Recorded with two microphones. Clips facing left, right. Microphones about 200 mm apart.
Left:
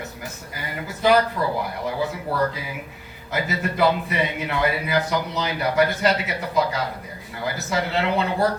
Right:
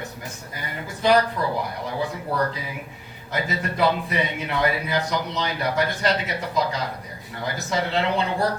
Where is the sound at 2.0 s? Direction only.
5° left (ahead or behind).